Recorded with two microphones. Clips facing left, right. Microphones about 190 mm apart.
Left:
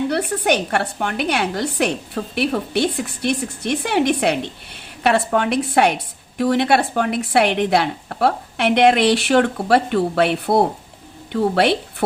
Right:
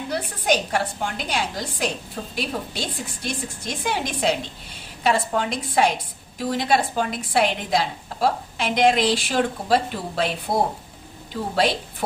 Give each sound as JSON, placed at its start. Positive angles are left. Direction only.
{"t": 0.1, "sound": "a woman's voice", "side_deg": 65}